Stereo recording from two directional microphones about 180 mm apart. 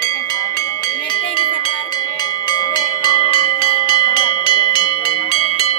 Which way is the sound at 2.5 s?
25° left (ahead or behind).